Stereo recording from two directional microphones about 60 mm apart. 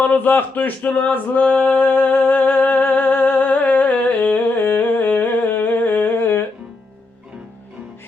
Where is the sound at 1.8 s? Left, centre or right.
Left.